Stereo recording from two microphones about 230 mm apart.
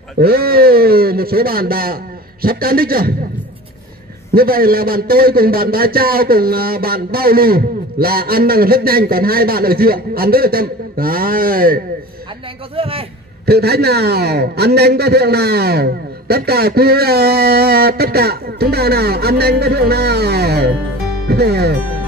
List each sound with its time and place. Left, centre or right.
0.2 s a man's voice: right
4.3 s a man's voice: right
12.7 s a man's voice: right
13.5 s a man's voice: right